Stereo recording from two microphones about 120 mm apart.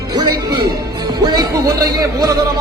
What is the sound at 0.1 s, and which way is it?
Music, 35° right (ahead or behind).